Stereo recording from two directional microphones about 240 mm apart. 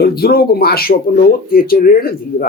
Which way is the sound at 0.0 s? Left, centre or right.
Left.